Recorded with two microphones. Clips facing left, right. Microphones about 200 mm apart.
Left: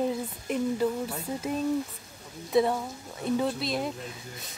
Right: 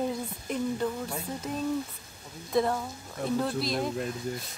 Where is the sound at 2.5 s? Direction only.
5° left (ahead or behind).